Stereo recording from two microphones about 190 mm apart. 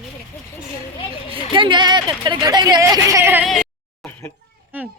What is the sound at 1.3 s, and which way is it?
Speech, 25° right (ahead or behind).